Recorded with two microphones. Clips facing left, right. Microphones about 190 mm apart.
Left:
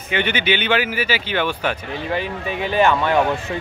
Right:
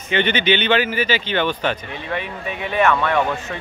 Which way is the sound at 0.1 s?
10° left (ahead or behind).